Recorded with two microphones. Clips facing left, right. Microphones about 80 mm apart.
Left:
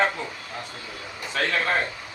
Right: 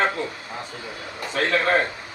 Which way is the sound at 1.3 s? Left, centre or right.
Right.